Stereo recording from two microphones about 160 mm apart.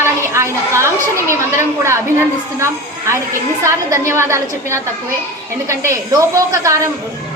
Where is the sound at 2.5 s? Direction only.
15° right (ahead or behind).